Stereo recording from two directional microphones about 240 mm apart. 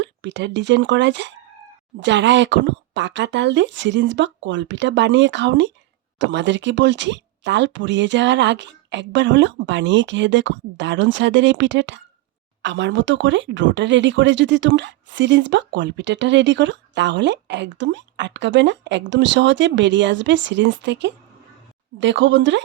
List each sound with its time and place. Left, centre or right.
0.0 s speech: right